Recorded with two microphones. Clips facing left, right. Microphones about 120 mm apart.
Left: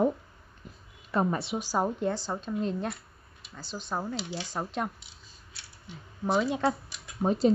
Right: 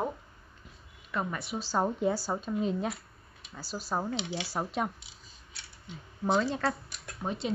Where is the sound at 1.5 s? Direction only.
10° left (ahead or behind).